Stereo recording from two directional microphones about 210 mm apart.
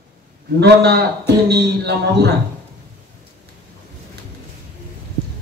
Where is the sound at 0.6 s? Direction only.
50° right (ahead or behind).